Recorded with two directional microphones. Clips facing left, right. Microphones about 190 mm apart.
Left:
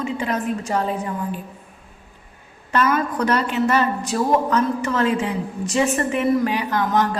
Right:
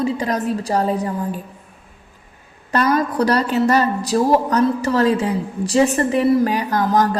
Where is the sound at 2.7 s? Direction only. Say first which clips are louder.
Right 2 dB; 35° right (ahead or behind).